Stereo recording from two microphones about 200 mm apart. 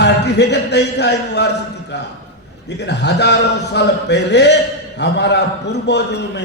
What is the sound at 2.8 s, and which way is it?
A man's voice, 60° left (ahead or behind).